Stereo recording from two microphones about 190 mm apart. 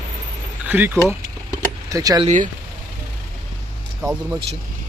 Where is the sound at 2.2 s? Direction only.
45° right (ahead or behind).